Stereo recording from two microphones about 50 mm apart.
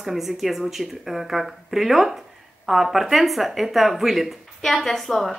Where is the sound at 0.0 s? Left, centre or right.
Centre.